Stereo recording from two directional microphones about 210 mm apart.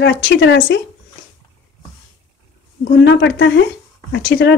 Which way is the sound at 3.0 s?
55° left (ahead or behind).